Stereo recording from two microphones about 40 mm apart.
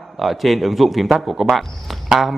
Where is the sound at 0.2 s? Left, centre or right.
Centre.